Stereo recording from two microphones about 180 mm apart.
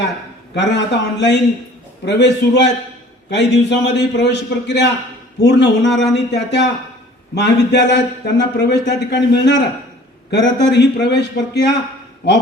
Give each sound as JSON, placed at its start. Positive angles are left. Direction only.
{"t": 0.5, "sound": "speech", "side_deg": 75}